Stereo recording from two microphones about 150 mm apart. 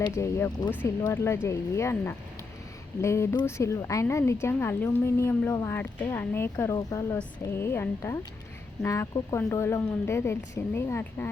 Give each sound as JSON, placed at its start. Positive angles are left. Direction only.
{"t": 0.1, "sound": "speech", "side_deg": 20}